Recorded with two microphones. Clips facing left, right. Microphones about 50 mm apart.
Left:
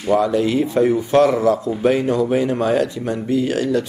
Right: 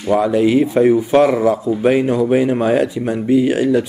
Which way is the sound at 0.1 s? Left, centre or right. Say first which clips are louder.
Right 3 dB; centre.